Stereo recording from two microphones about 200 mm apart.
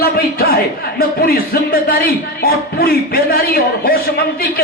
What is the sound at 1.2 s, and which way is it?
A man's voice, 50° left (ahead or behind).